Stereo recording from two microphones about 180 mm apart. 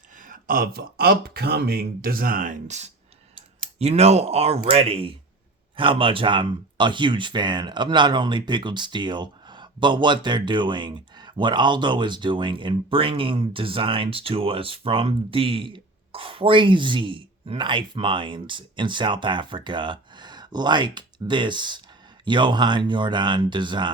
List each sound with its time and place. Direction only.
0.2 s speech: 50° right (ahead or behind); by 23.9 s 25° right (ahead or behind)